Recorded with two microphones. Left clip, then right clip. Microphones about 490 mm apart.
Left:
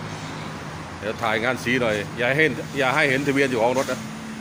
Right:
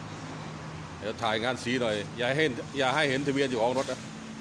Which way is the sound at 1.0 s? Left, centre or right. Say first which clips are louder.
Left 6 dB; right.